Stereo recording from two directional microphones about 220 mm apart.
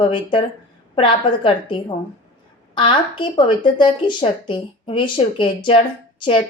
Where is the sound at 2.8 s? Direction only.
25° left (ahead or behind).